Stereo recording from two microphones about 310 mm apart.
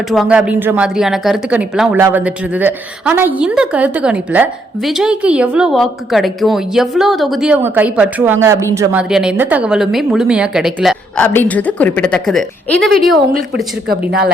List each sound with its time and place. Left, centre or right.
0.1 s speech: centre